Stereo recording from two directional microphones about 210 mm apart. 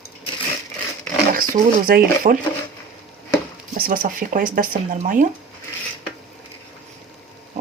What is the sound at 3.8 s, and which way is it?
Speech, 40° right (ahead or behind).